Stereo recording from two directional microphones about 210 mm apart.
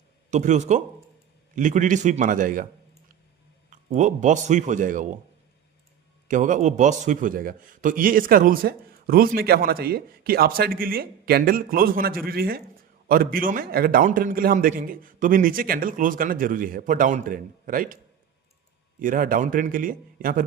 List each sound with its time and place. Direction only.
0.3 s a man's voice: 35° right (ahead or behind)
3.7 s a man's voice: 35° right (ahead or behind)
6.2 s a man's voice: 35° right (ahead or behind)
18.9 s a man's voice: 40° right (ahead or behind)